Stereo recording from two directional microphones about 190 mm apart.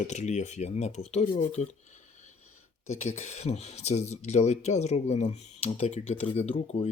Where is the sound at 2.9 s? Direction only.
35° left (ahead or behind).